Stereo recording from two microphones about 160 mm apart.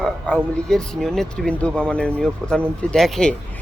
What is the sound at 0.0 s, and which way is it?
Speech, 5° left (ahead or behind).